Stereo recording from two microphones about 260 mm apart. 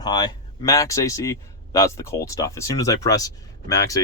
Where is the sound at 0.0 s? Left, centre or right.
Centre.